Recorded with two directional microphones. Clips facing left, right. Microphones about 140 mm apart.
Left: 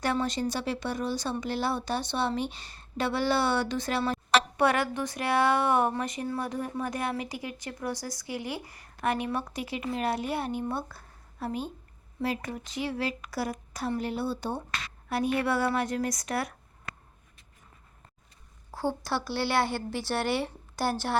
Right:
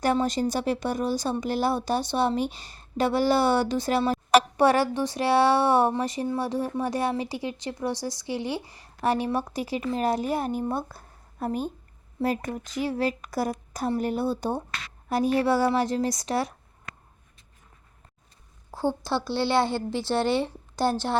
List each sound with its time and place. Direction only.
0.0 s speech: 40° right (ahead or behind)
19.0 s speech: 25° right (ahead or behind)